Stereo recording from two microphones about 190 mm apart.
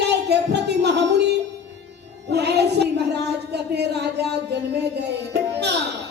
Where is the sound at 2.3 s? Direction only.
60° right (ahead or behind).